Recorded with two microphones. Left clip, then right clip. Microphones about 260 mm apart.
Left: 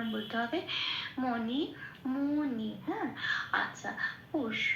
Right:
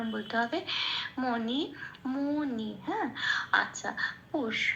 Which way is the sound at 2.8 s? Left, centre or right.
Right.